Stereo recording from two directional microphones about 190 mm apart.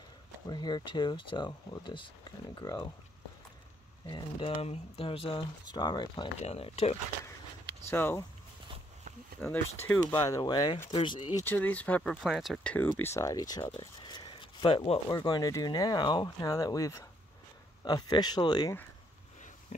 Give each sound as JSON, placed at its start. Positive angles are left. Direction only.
{"t": 0.5, "sound": "speech", "side_deg": 20}
{"t": 4.1, "sound": "speech", "side_deg": 25}
{"t": 6.4, "sound": "speech", "side_deg": 35}
{"t": 7.9, "sound": "speech", "side_deg": 10}
{"t": 9.4, "sound": "speech", "side_deg": 10}
{"t": 11.4, "sound": "speech", "side_deg": 10}
{"t": 13.0, "sound": "speech", "side_deg": 15}